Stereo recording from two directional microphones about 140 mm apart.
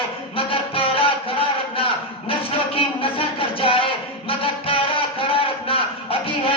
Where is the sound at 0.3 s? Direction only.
40° left (ahead or behind).